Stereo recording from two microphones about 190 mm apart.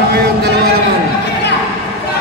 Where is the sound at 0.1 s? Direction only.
55° right (ahead or behind).